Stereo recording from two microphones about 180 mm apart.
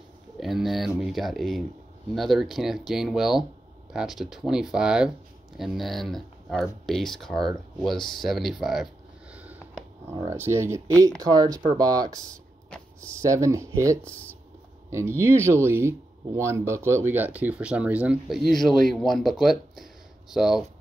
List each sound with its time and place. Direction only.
0.4 s speech: centre (ahead or behind)
9.3 s sniff: 10° right (ahead or behind)
10.1 s speech: 15° right (ahead or behind)
12.6 s a sound: 5° left (ahead or behind)
13.2 s speech: 15° right (ahead or behind)